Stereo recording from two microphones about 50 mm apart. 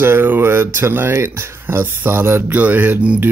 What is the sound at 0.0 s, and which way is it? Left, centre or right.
Speech, right.